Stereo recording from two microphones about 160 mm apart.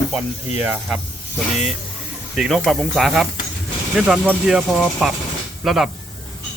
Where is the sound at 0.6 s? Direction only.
5° right (ahead or behind).